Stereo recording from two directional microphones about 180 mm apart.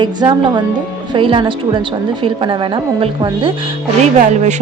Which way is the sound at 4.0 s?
40° right (ahead or behind).